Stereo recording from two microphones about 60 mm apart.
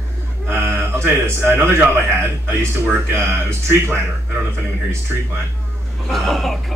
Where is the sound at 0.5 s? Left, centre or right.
Right.